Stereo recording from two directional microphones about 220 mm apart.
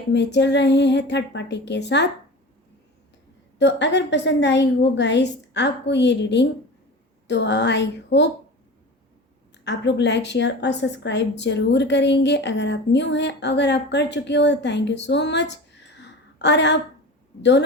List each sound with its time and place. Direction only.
0.1 s a woman's voice: 50° left (ahead or behind)
3.6 s a woman's voice: 50° left (ahead or behind)
9.6 s a woman's voice: 50° left (ahead or behind)